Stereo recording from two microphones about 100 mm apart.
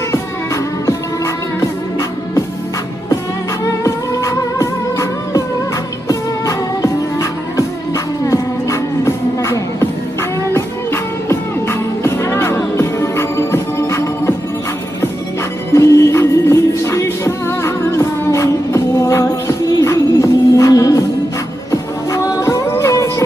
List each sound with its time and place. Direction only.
0.8 s music: 30° left (ahead or behind)
3.6 s music: 35° left (ahead or behind)
15.7 s music: 30° left (ahead or behind)
22.1 s music: 35° left (ahead or behind)